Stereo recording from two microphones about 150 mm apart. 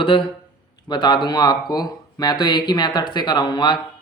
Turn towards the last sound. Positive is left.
turn(degrees=30)  # may be behind; listen again after turning